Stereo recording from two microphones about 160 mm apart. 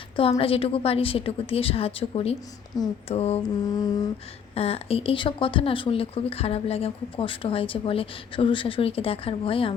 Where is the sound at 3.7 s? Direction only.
25° left (ahead or behind).